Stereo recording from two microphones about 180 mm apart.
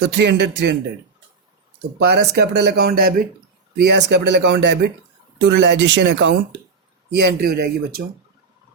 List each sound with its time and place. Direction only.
0.2 s speech: 70° right (ahead or behind)
2.0 s speech: 65° right (ahead or behind)
7.1 s speech: 65° right (ahead or behind)